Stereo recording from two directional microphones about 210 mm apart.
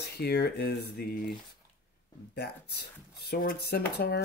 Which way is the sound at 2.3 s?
50° left (ahead or behind).